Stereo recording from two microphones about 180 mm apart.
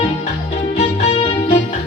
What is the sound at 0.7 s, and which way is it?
Music, 35° left (ahead or behind).